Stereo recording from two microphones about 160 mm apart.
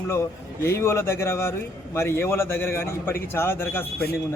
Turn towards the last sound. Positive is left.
turn(degrees=15)  # may be behind; listen again after turning